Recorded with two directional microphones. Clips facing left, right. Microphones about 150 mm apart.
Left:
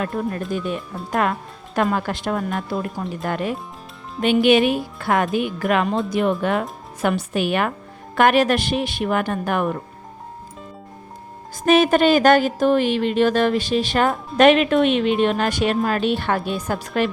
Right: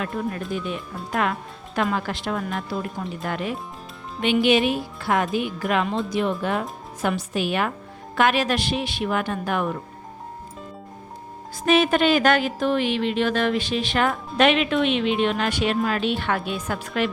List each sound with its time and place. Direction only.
0.0 s speech: 40° left (ahead or behind)
1.7 s a woman's voice: 45° left (ahead or behind)
11.6 s a woman's voice: 45° left (ahead or behind)